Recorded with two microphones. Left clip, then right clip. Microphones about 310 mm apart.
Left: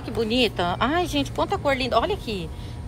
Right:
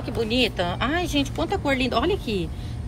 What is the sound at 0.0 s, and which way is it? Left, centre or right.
Speech, centre.